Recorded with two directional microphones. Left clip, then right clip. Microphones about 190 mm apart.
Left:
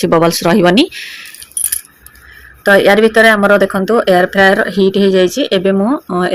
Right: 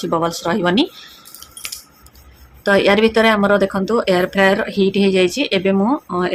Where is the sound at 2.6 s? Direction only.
20° left (ahead or behind).